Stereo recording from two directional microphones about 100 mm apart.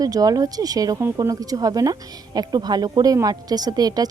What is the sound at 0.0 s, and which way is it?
Speech, 40° right (ahead or behind).